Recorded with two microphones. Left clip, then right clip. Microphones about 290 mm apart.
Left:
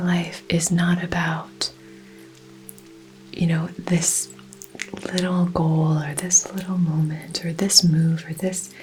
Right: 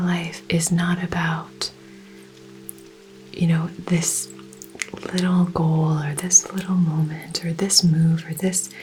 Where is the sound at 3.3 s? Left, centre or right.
Left.